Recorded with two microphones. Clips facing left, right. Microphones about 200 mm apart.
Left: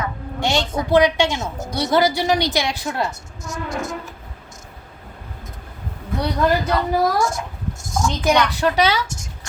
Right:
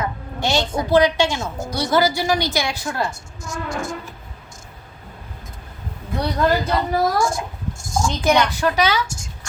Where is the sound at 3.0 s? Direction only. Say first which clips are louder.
Even; 30° right (ahead or behind).